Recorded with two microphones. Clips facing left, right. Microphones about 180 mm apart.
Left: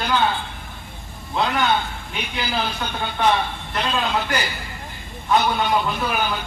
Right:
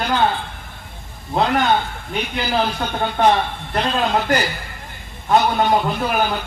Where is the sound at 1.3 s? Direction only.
40° right (ahead or behind).